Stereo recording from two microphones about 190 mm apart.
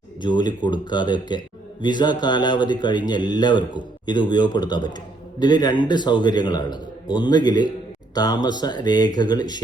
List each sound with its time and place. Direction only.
0.2 s speech: 25° left (ahead or behind)